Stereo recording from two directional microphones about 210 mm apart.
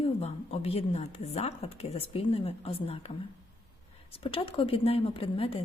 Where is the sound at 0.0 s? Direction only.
30° left (ahead or behind).